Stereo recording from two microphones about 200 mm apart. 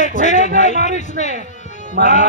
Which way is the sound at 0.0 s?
40° left (ahead or behind).